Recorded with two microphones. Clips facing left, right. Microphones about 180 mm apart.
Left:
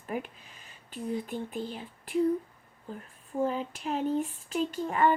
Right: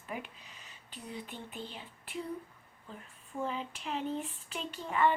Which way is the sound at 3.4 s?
45° left (ahead or behind).